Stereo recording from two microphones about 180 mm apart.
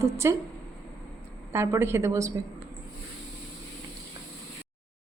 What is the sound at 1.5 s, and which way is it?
Speech, 15° right (ahead or behind).